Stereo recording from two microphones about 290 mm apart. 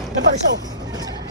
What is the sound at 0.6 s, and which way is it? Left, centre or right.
Vehicle, centre.